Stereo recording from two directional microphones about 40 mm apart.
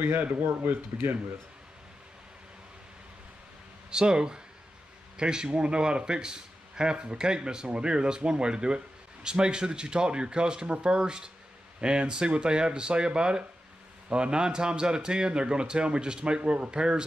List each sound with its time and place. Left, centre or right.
0.2 s speech: right
3.9 s a man's voice: centre